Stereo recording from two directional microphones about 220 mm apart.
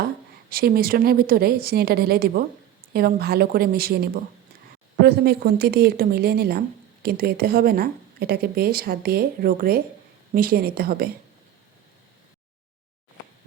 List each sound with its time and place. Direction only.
0.5 s speech: 40° right (ahead or behind)